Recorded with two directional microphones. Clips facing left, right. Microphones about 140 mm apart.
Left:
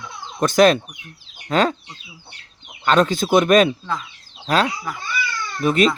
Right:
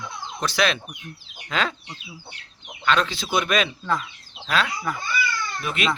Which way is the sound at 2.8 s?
45° left (ahead or behind).